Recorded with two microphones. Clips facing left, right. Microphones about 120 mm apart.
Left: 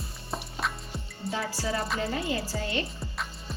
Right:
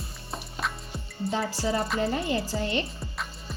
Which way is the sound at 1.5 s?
25° right (ahead or behind).